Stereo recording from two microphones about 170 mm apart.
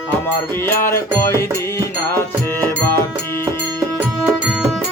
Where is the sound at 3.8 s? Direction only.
10° right (ahead or behind).